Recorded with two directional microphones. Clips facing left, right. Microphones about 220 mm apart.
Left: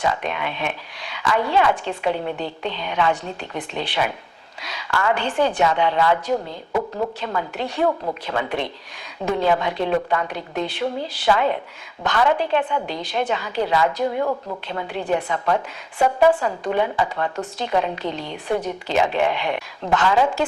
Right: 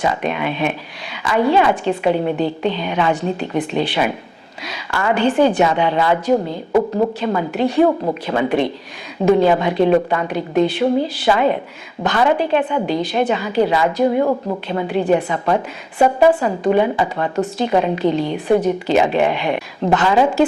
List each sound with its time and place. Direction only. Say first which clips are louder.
0.0 s a woman's voice: right 4 dB; 10° right (ahead or behind)